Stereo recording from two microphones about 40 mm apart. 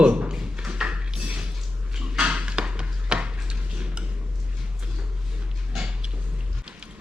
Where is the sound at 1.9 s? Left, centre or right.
Right.